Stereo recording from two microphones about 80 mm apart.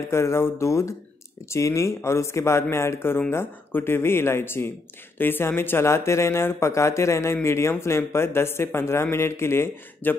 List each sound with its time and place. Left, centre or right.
0.1 s speech: left